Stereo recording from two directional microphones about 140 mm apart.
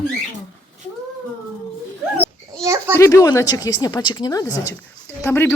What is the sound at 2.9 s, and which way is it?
A woman's voice, 20° left (ahead or behind).